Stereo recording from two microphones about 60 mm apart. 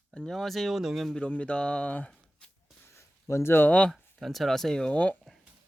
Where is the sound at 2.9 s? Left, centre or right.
Left.